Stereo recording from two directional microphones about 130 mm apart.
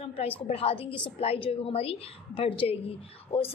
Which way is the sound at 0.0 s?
50° left (ahead or behind).